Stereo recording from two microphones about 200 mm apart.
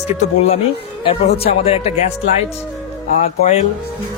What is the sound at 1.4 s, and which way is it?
Speech, 30° left (ahead or behind).